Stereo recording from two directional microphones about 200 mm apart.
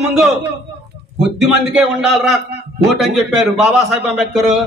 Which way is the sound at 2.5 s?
55° right (ahead or behind).